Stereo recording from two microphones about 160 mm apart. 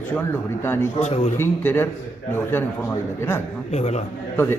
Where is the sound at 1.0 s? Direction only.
45° left (ahead or behind).